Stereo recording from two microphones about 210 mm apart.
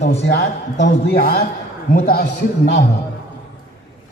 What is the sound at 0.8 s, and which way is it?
A man's voice, 50° left (ahead or behind).